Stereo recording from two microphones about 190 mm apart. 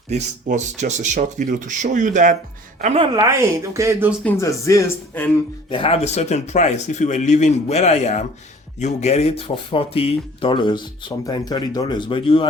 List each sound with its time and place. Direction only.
0.1 s speech: 40° right (ahead or behind)
3.2 s speech: 15° right (ahead or behind)
4.2 s speech: 10° left (ahead or behind)
5.6 s speech: 30° left (ahead or behind)